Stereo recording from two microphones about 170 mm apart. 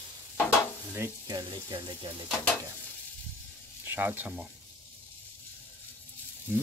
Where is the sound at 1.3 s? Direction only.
25° right (ahead or behind).